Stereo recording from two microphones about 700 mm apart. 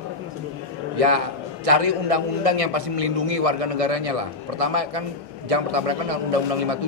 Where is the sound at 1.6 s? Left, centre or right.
Right.